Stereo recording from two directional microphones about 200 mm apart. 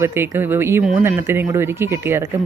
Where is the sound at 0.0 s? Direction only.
10° right (ahead or behind).